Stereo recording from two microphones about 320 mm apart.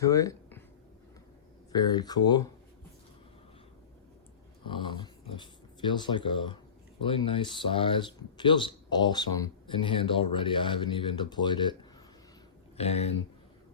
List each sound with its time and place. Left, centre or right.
0.0 s speech: centre
1.7 s speech: centre
4.6 s speech: centre